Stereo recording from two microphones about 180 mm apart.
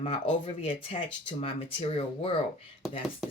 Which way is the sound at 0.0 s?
30° left (ahead or behind).